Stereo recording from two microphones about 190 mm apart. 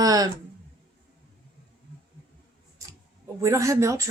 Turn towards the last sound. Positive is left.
turn(degrees=-15)  # may be behind; listen again after turning